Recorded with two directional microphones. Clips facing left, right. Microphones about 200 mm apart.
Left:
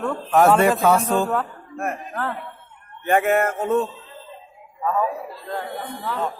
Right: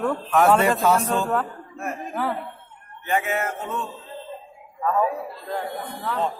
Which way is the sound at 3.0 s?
55° left (ahead or behind).